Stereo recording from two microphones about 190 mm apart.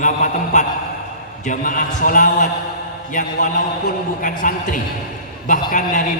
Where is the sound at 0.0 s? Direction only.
40° left (ahead or behind).